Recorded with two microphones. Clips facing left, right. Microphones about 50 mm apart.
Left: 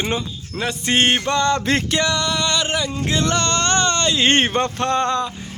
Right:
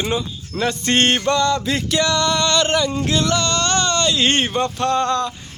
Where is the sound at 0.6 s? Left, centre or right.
Centre.